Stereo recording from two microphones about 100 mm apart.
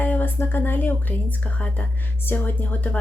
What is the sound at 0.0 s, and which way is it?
A woman's voice, 20° left (ahead or behind).